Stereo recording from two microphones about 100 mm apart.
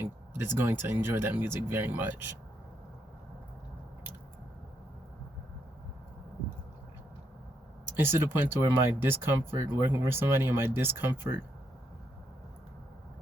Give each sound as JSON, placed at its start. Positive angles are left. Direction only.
{"t": 0.0, "sound": "speech", "side_deg": -25}
{"t": 7.9, "sound": "speech", "side_deg": -20}